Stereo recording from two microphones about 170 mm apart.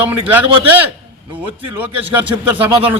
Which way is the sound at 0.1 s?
10° right (ahead or behind).